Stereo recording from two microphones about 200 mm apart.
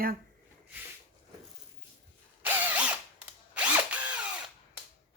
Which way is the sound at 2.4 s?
10° right (ahead or behind).